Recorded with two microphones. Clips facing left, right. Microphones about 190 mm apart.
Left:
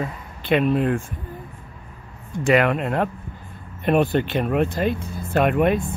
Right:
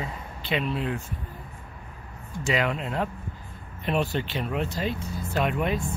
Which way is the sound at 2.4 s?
60° left (ahead or behind).